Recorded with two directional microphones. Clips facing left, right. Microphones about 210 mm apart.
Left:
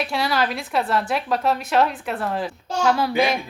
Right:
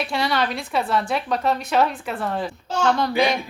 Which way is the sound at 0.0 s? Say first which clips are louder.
Even; centre (ahead or behind).